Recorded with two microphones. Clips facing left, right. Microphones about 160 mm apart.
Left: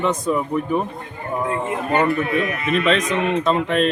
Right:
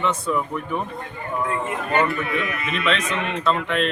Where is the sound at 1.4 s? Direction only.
25° left (ahead or behind).